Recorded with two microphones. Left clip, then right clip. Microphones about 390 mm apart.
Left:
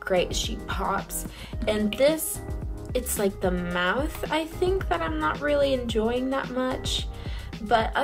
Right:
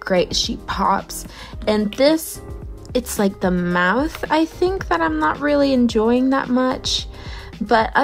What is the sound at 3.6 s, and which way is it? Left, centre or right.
Speech, centre.